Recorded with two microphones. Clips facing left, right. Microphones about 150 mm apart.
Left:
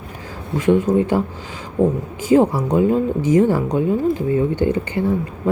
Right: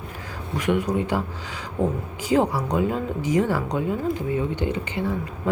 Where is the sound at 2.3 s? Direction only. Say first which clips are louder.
Left 6 dB; 25° left (ahead or behind).